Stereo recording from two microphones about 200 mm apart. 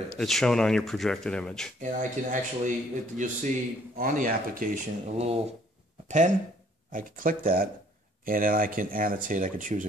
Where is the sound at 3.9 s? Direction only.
45° right (ahead or behind).